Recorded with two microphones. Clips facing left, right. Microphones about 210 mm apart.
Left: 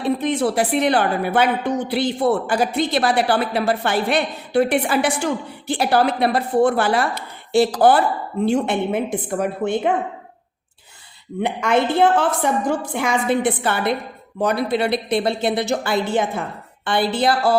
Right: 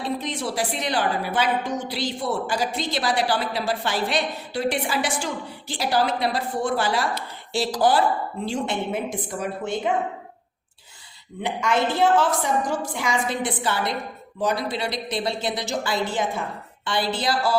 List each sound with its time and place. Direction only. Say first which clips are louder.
0.0 s a woman's voice: left 8 dB; 60° left (ahead or behind)
11.4 s a woman's voice: left 4 dB; 60° left (ahead or behind)